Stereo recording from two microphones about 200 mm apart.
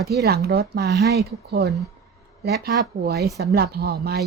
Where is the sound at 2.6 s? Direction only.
50° right (ahead or behind).